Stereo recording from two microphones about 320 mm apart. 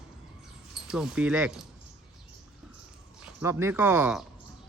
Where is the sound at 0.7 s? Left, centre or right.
Centre.